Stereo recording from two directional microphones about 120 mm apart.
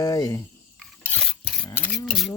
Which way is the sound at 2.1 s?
Centre (ahead or behind).